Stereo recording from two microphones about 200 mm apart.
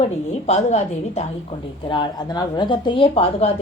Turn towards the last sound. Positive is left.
turn(degrees=30)  # may be behind; listen again after turning